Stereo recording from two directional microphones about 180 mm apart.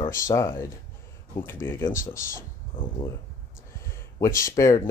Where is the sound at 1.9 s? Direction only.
50° left (ahead or behind).